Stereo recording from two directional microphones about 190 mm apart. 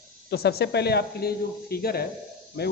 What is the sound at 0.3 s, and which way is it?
Speech, 55° left (ahead or behind).